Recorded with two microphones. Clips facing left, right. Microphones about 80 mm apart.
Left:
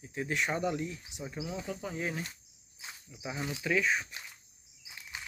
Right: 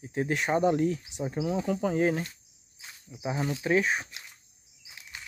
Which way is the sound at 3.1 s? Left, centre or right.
Right.